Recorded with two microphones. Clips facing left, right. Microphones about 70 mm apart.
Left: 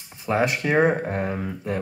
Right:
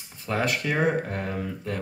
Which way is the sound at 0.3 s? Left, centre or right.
Left.